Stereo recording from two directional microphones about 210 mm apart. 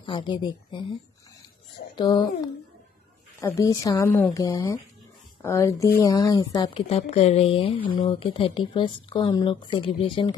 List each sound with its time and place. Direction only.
0.0 s speech: 25° left (ahead or behind)
2.0 s speech: 20° left (ahead or behind)